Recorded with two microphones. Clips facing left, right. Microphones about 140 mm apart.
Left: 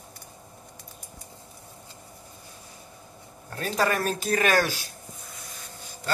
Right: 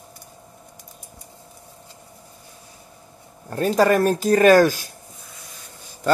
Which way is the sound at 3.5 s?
45° right (ahead or behind).